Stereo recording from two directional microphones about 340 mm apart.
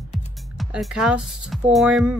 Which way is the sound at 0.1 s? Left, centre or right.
Centre.